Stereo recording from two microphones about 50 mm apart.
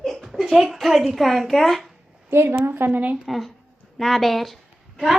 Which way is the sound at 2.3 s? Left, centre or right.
Right.